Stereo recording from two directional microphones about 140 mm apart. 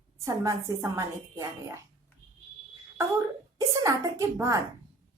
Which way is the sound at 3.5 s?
20° right (ahead or behind).